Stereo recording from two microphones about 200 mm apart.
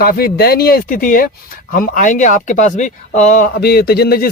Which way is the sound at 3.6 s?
55° left (ahead or behind).